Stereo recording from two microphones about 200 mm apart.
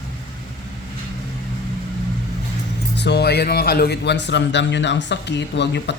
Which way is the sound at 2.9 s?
60° left (ahead or behind).